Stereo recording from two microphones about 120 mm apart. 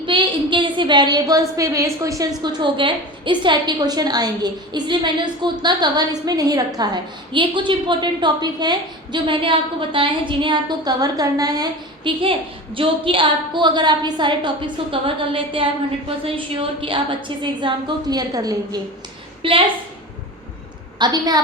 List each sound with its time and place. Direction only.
0.0 s a woman's voice: 45° right (ahead or behind); by 2.3 s 30° right (ahead or behind)
2.4 s a woman's voice: 40° right (ahead or behind)
12.2 s a woman's voice: 45° right (ahead or behind); by 18.8 s 30° right (ahead or behind)
19.4 s a woman's voice: 45° right (ahead or behind)
21.0 s a woman's voice: 35° right (ahead or behind)